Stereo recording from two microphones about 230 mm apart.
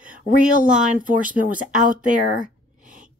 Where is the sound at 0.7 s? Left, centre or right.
Right.